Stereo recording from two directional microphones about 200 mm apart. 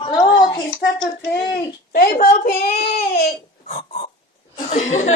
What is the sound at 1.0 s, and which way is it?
Child singing, 55° left (ahead or behind).